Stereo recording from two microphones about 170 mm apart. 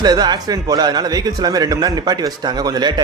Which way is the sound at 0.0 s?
25° right (ahead or behind).